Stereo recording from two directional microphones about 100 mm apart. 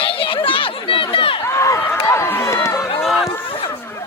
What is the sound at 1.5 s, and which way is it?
Run, 30° left (ahead or behind).